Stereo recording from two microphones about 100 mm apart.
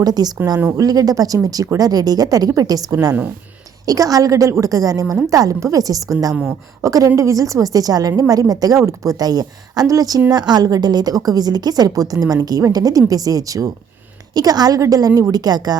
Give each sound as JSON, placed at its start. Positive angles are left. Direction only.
{"t": 0.0, "sound": "a woman's voice", "side_deg": -40}